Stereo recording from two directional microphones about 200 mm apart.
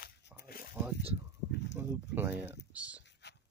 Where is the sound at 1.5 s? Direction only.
60° left (ahead or behind).